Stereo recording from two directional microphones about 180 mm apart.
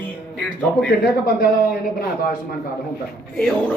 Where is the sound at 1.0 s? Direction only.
60° left (ahead or behind).